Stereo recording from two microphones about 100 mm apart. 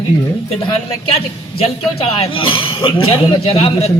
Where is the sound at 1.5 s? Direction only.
70° left (ahead or behind).